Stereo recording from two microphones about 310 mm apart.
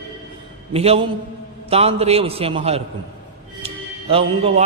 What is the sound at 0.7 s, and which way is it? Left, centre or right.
A man's voice, centre.